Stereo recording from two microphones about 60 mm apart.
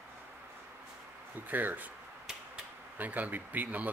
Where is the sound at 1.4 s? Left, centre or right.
Right.